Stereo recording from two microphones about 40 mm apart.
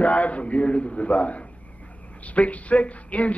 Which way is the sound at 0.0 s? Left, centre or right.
Left.